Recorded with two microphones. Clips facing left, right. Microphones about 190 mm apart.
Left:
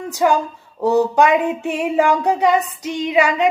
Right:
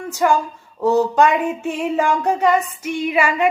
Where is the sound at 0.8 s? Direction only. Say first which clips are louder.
Left 1 dB; 15° left (ahead or behind).